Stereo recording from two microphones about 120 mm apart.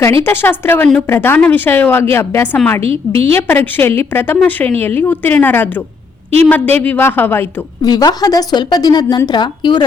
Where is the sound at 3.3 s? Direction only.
15° left (ahead or behind).